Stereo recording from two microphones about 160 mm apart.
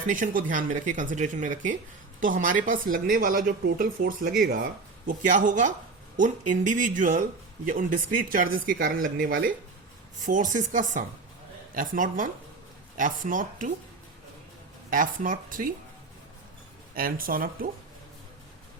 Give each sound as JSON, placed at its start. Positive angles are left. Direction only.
{"t": 0.1, "sound": "speech", "side_deg": -55}
{"t": 5.0, "sound": "speech", "side_deg": -55}
{"t": 10.2, "sound": "speech", "side_deg": -55}
{"t": 14.8, "sound": "speech", "side_deg": -55}
{"t": 16.9, "sound": "speech", "side_deg": -65}